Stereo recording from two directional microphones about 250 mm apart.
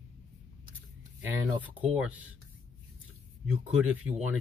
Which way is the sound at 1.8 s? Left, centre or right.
Centre.